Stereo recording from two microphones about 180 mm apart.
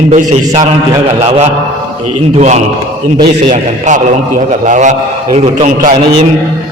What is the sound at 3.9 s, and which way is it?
A man's voice, 45° right (ahead or behind).